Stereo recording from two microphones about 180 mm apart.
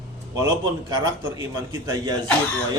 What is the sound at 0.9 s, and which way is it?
A man's voice, 20° right (ahead or behind).